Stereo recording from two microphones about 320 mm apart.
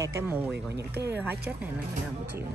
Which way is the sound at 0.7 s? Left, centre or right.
Right.